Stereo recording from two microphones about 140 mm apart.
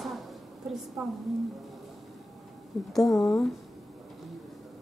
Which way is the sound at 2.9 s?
Centre (ahead or behind).